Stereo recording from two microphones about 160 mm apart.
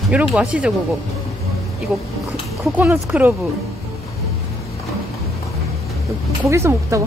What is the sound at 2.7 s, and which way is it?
Speech, 10° right (ahead or behind).